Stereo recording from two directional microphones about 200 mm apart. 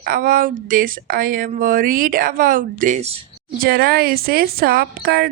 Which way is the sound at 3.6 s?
50° right (ahead or behind).